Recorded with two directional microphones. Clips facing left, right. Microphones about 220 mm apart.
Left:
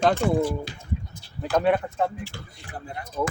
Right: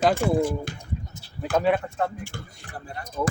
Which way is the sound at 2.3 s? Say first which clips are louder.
Right 2 dB; 50° right (ahead or behind).